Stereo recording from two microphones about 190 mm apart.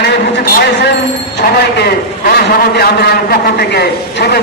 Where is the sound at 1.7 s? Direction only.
55° left (ahead or behind).